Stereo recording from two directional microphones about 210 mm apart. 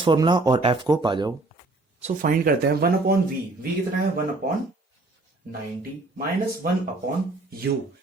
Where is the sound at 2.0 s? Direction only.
35° right (ahead or behind).